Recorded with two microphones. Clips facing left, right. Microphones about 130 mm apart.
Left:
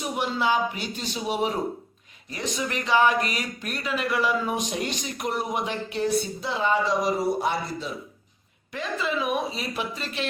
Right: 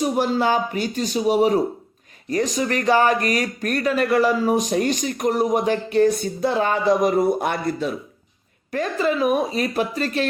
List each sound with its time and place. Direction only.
0.0 s speech: 40° right (ahead or behind); by 7.9 s 60° right (ahead or behind)
8.7 s speech: 45° right (ahead or behind)